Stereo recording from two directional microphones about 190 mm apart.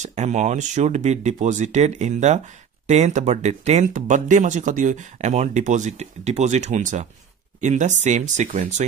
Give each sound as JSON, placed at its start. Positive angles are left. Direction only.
{"t": 0.0, "sound": "speech", "side_deg": -35}